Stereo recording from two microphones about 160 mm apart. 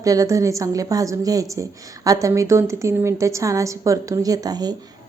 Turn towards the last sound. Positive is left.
turn(degrees=-25)  # may be behind; listen again after turning